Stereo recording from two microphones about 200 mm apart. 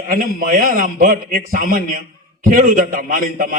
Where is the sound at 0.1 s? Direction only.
45° right (ahead or behind).